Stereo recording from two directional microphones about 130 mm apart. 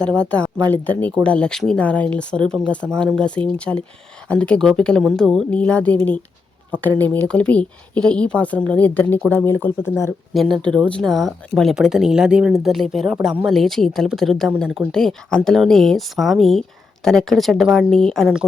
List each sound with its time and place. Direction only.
0.2 s speech: 10° left (ahead or behind)